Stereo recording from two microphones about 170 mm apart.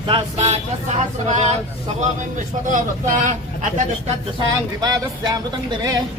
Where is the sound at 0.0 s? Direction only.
30° right (ahead or behind).